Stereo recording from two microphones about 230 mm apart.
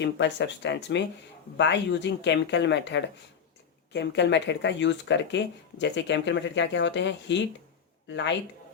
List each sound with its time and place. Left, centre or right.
0.0 s speech: left